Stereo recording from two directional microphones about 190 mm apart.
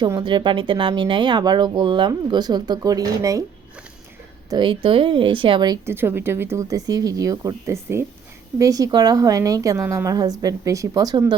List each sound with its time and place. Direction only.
0.0 s speech: 20° right (ahead or behind)
4.4 s a woman's voice: 25° right (ahead or behind)